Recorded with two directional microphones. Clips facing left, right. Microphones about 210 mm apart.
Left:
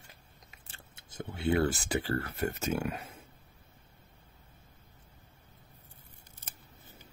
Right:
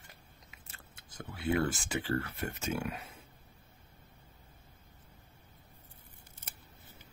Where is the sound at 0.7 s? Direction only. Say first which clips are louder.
Left 2 dB; 25° left (ahead or behind); by 3.1 s 40° left (ahead or behind).